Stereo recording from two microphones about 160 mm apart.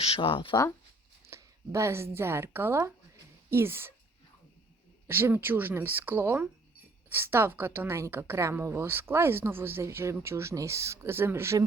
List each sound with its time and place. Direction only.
0.0 s speech: 35° left (ahead or behind)
1.3 s a woman's voice: 20° right (ahead or behind)
5.0 s a woman's voice: 15° right (ahead or behind)